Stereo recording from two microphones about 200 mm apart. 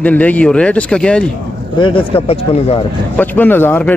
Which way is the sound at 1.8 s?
30° left (ahead or behind).